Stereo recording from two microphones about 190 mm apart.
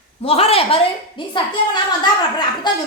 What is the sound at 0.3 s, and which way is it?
A woman's voice, 30° left (ahead or behind).